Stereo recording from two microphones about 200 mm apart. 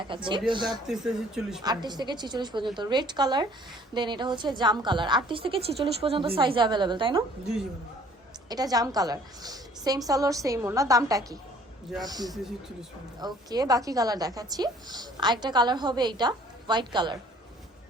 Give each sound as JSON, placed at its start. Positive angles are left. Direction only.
{"t": 0.1, "sound": "a woman's voice", "side_deg": -25}
{"t": 0.9, "sound": "speech", "side_deg": -5}
{"t": 1.6, "sound": "a woman's voice", "side_deg": -20}
{"t": 8.4, "sound": "a woman's voice", "side_deg": -20}